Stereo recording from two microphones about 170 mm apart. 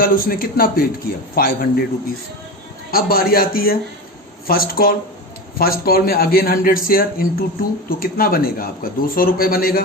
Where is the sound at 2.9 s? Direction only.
60° left (ahead or behind).